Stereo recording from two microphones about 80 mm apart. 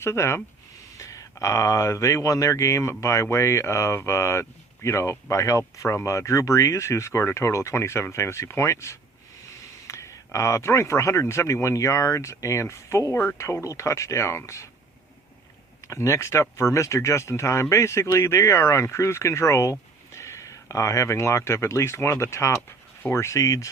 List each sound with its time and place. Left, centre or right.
0.0 s speech: left
15.9 s speech: left